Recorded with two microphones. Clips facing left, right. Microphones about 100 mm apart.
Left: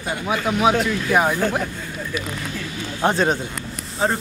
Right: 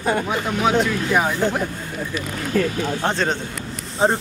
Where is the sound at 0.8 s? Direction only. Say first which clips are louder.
Left 1 dB; 5° left (ahead or behind).